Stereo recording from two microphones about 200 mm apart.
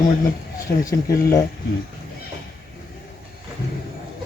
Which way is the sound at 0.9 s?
15° left (ahead or behind).